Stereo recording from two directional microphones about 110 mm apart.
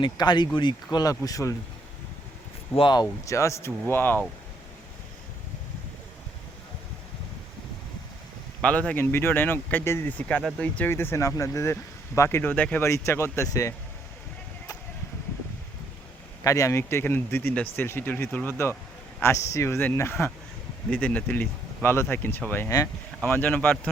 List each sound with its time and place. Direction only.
0.0 s speech: 40° left (ahead or behind)
2.7 s speech: 45° left (ahead or behind); by 4.2 s 20° left (ahead or behind)
8.6 s speech: 10° left (ahead or behind)
12.8 s speech: 25° left (ahead or behind)
16.4 s speech: 30° left (ahead or behind); by 23.9 s 15° left (ahead or behind)